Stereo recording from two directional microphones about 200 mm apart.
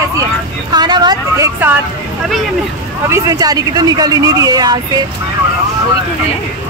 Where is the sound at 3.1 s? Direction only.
20° right (ahead or behind).